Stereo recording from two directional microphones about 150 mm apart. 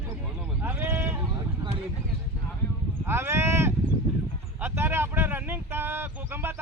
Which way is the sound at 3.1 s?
15° right (ahead or behind).